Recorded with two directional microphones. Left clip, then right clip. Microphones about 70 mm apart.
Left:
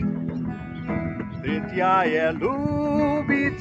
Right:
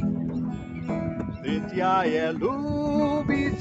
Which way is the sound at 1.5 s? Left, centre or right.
Left.